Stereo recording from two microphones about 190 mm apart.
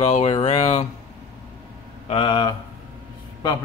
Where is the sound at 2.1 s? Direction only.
30° left (ahead or behind).